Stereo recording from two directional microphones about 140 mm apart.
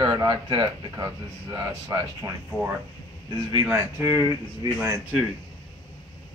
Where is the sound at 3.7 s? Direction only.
20° right (ahead or behind).